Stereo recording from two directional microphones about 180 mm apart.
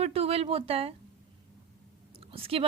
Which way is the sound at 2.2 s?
30° right (ahead or behind).